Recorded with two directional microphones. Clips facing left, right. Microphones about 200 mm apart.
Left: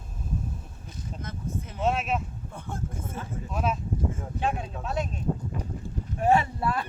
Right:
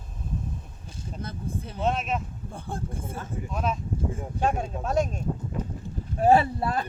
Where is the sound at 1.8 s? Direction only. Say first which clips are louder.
Even; 5° left (ahead or behind).